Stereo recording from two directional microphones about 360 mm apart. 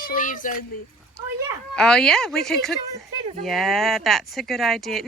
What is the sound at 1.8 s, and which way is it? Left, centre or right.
Speech, centre.